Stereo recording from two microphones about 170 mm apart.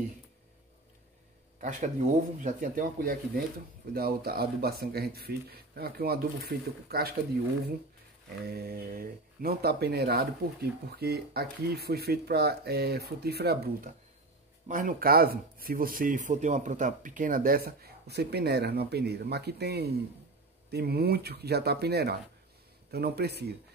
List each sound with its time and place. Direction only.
1.6 s speech: 45° right (ahead or behind); by 7.2 s 65° right (ahead or behind)
8.5 s speech: 65° right (ahead or behind)
14.7 s speech: 50° right (ahead or behind); by 23.5 s 75° right (ahead or behind)